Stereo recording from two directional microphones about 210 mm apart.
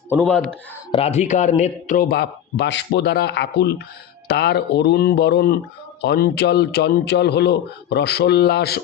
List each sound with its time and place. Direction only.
0.3 s speech: 5° left (ahead or behind)
0.9 s a man's voice: 30° left (ahead or behind); by 8.8 s 50° left (ahead or behind)